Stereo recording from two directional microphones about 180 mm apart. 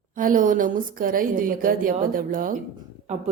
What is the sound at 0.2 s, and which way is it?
A woman's voice, 50° right (ahead or behind).